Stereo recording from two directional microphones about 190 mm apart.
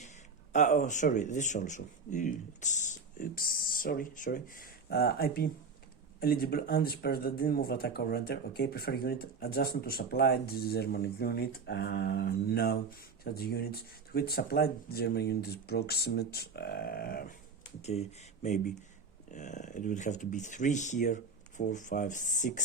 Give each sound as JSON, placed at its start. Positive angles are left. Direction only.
{"t": 0.5, "sound": "speech", "side_deg": 40}
{"t": 18.4, "sound": "speech", "side_deg": 40}